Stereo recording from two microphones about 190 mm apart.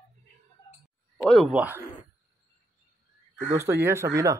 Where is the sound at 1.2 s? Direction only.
Centre (ahead or behind).